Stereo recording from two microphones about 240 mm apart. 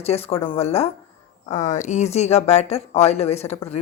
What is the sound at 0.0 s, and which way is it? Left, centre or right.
Speech, left.